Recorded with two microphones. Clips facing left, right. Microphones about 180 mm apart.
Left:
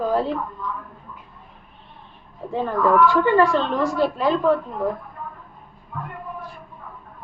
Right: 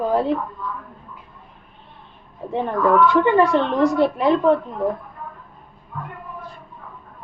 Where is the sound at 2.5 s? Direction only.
20° right (ahead or behind).